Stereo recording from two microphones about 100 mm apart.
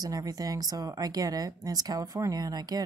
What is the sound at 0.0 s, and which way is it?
Speech, 40° right (ahead or behind).